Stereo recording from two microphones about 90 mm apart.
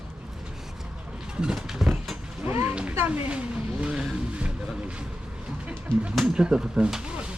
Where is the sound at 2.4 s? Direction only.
25° right (ahead or behind).